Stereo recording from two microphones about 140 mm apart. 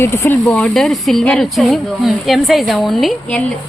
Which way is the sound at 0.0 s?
15° left (ahead or behind).